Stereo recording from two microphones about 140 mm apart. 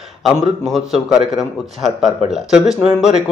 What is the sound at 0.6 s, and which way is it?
A man's voice, centre (ahead or behind).